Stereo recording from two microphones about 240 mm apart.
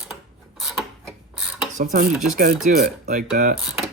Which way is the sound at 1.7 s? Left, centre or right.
Right.